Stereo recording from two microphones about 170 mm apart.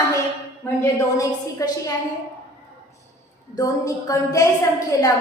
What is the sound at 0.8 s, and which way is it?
Speech, 20° left (ahead or behind).